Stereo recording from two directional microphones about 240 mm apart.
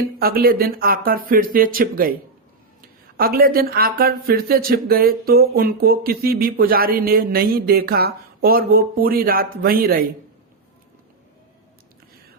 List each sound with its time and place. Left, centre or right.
0.2 s speech: right
3.2 s speech: right